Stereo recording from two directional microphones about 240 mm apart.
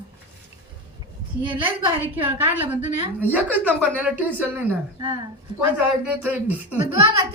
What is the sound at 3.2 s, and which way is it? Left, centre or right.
A woman's voice, centre.